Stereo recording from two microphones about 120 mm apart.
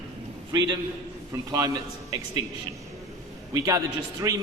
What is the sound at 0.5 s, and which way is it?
A man's voice, 35° right (ahead or behind).